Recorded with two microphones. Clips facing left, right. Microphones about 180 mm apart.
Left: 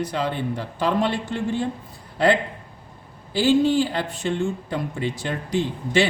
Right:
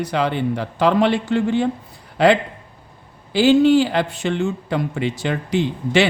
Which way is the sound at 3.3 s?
75° right (ahead or behind).